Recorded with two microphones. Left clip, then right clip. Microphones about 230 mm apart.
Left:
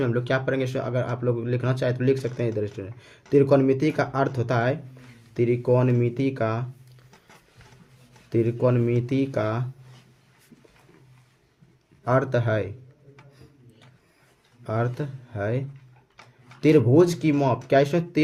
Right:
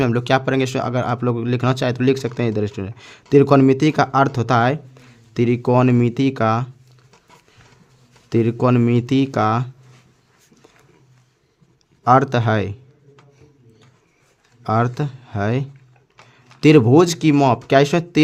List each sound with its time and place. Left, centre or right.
0.0 s speech: right
8.3 s speech: right
12.0 s speech: right
14.6 s speech: right